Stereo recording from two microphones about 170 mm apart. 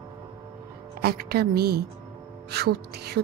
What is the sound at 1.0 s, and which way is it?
A woman's voice, 65° right (ahead or behind).